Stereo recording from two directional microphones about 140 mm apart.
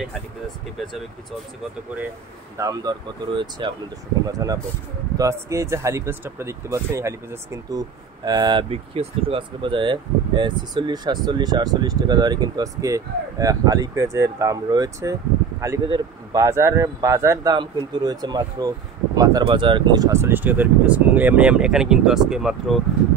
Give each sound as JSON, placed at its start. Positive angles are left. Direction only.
{"t": 2.5, "sound": "speech", "side_deg": -25}
{"t": 8.3, "sound": "speech", "side_deg": -30}
{"t": 8.6, "sound": "speech", "side_deg": -40}
{"t": 19.4, "sound": "speech", "side_deg": -35}